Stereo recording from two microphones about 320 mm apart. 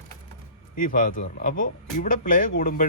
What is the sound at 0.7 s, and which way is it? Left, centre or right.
Speech, left.